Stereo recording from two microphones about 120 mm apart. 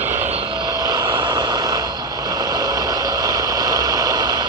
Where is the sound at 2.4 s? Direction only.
30° right (ahead or behind).